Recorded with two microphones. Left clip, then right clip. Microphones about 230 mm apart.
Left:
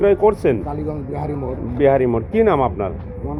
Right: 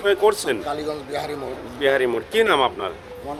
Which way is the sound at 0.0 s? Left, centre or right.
Right.